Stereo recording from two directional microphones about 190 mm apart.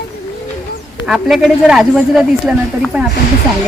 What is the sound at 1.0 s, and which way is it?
Speech, centre (ahead or behind).